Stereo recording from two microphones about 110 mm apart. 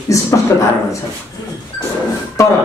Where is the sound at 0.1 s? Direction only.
30° left (ahead or behind).